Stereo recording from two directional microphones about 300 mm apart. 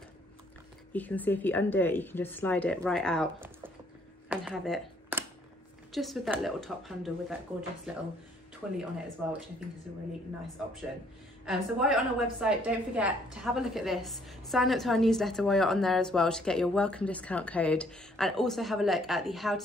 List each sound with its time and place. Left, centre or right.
0.9 s a woman's voice: centre
3.3 s typing: centre
4.3 s a sound: centre
5.9 s a woman's voice: centre
11.4 s a woman's voice: centre